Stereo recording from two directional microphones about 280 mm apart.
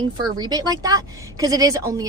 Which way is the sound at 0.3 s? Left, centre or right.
Centre.